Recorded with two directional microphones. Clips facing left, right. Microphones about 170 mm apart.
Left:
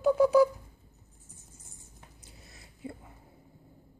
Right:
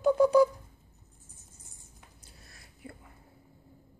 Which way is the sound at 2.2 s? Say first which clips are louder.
Left 2 dB; 20° left (ahead or behind).